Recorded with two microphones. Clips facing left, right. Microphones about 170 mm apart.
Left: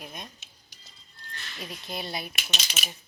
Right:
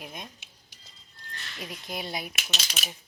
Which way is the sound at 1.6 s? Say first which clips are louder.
Even; 15° right (ahead or behind).